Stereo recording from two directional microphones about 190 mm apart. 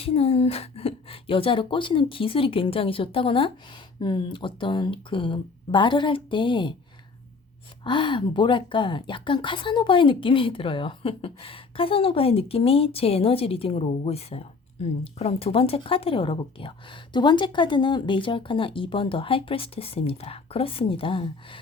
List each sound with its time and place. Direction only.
0.0 s a woman's voice: 30° left (ahead or behind)
7.9 s a woman's voice: 25° left (ahead or behind)